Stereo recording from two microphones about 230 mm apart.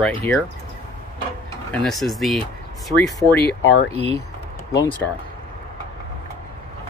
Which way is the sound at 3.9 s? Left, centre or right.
Right.